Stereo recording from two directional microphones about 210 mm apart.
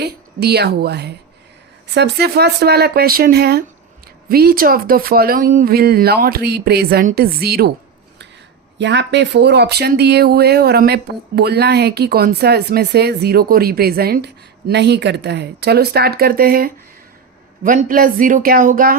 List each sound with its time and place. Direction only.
0.0 s speech: 50° right (ahead or behind)
8.8 s speech: 55° right (ahead or behind); by 18.9 s 40° right (ahead or behind)